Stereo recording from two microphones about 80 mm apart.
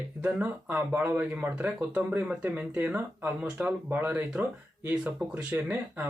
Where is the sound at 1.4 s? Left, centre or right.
Right.